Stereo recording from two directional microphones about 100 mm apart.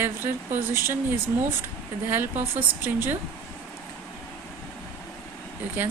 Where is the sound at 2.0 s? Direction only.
20° right (ahead or behind).